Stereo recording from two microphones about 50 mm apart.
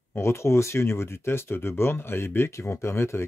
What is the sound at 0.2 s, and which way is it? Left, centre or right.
Speech, left.